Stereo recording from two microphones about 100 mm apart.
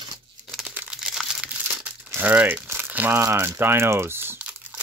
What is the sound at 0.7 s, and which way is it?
Crumpling, 10° right (ahead or behind).